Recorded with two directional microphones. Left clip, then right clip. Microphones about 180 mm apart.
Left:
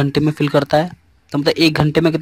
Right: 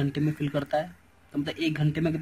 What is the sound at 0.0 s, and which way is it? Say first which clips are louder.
Speech: left 12 dB; 45° left (ahead or behind).